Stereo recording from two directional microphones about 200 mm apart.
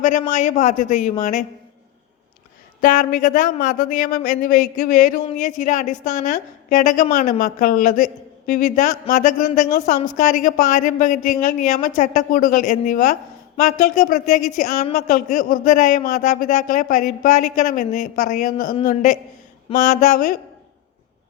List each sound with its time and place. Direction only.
0.0 s a woman's voice: 40° left (ahead or behind)
2.8 s a woman's voice: 40° left (ahead or behind)